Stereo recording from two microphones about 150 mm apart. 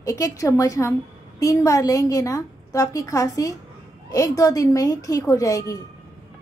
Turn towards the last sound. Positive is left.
turn(degrees=20)  # may be behind; listen again after turning